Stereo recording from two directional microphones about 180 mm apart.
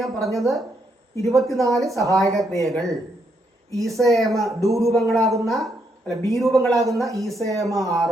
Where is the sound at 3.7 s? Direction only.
20° right (ahead or behind).